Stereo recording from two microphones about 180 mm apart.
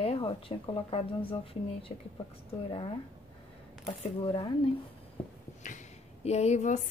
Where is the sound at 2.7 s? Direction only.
30° left (ahead or behind).